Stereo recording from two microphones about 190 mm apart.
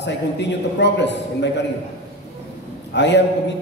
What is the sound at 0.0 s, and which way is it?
A man's voice, 65° left (ahead or behind).